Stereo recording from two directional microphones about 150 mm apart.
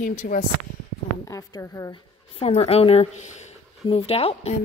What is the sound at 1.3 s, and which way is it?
Speech, 20° left (ahead or behind).